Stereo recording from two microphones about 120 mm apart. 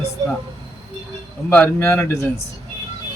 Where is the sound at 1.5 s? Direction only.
15° left (ahead or behind).